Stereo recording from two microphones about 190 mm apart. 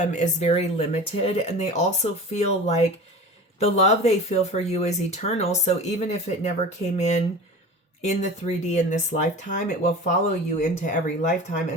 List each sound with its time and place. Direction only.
0.0 s speech: 40° left (ahead or behind)